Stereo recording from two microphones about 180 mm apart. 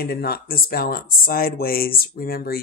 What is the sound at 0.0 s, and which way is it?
Speech, 60° left (ahead or behind).